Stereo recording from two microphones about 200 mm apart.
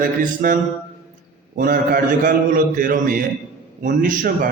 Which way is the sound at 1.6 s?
45° right (ahead or behind).